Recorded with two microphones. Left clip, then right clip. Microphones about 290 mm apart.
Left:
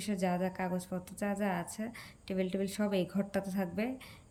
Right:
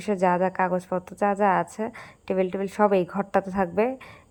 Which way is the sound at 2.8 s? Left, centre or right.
Right.